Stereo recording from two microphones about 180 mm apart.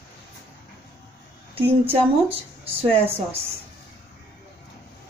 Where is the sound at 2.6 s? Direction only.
30° right (ahead or behind).